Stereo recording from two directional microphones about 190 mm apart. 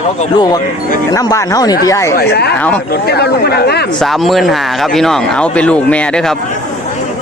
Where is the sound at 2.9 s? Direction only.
55° left (ahead or behind).